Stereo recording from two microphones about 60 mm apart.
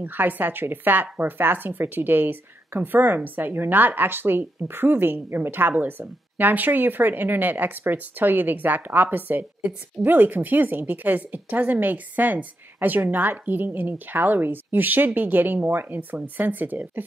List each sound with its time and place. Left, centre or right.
0.0 s a woman's voice: right